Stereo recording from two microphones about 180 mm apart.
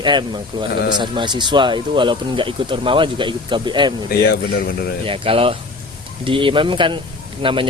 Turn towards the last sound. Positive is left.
turn(degrees=-30)  # may be behind; listen again after turning